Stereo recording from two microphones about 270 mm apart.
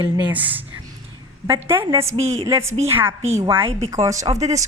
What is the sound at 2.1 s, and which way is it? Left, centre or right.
Speech, right.